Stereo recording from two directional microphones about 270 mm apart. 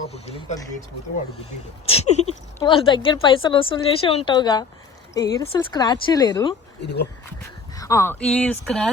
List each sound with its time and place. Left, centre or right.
0.1 s a woman's voice: left
1.9 s a sound: left
2.6 s a woman's voice: centre
6.8 s speech: left
7.8 s speech: centre